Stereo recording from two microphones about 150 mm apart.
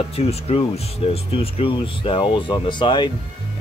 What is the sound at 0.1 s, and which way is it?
Speech, 45° left (ahead or behind).